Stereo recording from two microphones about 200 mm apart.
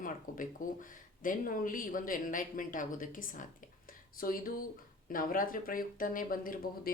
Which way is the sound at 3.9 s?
45° left (ahead or behind).